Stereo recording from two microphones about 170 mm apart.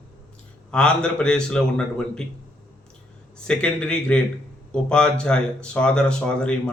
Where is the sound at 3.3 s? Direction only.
5° left (ahead or behind).